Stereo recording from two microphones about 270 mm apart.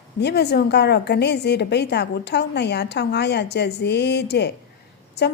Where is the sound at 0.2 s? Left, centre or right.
Left.